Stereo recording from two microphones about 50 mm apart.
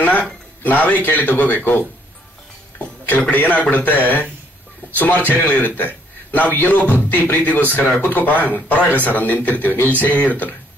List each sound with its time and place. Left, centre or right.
0.0 s speech: left